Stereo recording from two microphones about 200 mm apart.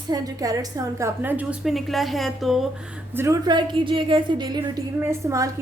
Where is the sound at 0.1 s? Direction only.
20° right (ahead or behind); by 2.6 s centre (ahead or behind).